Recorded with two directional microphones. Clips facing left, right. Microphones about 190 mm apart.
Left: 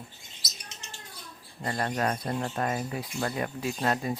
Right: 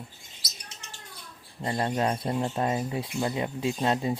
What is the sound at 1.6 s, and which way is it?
Speech, 20° right (ahead or behind).